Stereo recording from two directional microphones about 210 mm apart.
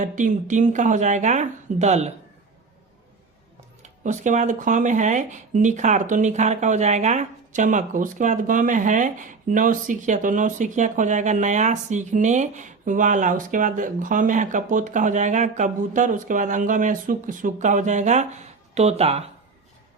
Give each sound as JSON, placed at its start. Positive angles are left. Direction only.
{"t": 0.0, "sound": "speech", "side_deg": -35}
{"t": 3.8, "sound": "speech", "side_deg": -35}